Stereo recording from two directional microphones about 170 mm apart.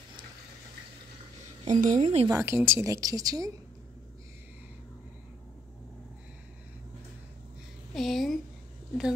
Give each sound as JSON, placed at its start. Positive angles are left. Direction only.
{"t": 1.6, "sound": "a woman's voice", "side_deg": -45}
{"t": 2.2, "sound": "a woman's voice", "side_deg": -15}
{"t": 7.9, "sound": "a sound", "side_deg": 0}